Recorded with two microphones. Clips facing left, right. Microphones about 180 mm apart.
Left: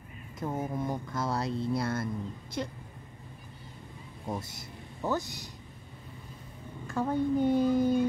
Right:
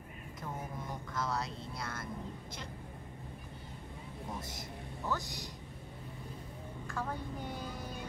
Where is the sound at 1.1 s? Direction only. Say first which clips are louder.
Left 3 dB; 30° left (ahead or behind).